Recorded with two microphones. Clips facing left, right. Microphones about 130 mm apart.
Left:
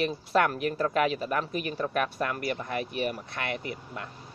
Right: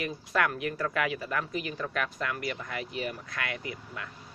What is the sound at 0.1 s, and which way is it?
A man's voice, 30° left (ahead or behind).